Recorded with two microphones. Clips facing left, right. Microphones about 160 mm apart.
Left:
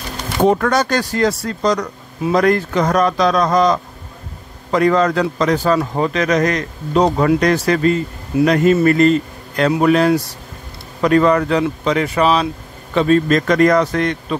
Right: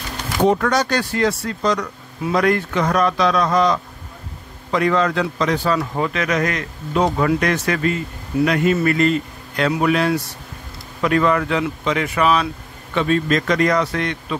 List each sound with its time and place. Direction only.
0.5 s a man's voice: 50° left (ahead or behind)